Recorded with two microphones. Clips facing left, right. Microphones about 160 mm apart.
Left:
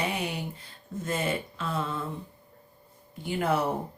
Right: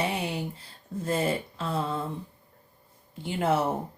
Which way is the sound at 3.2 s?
25° right (ahead or behind).